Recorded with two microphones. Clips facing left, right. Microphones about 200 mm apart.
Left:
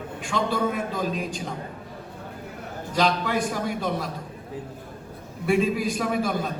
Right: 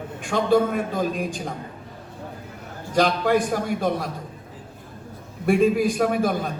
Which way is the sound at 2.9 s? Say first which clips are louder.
Right 4 dB; 50° right (ahead or behind).